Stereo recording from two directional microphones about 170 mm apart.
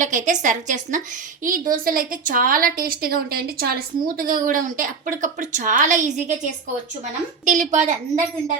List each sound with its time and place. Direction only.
0.0 s a woman's voice: 50° right (ahead or behind)